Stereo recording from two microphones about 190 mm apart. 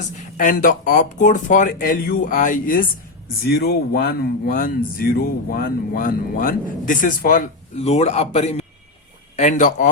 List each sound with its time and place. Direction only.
0.3 s speech: 45° left (ahead or behind)
3.4 s speech: 55° left (ahead or behind)